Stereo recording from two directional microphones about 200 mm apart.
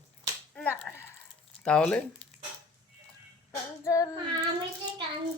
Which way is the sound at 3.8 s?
15° left (ahead or behind).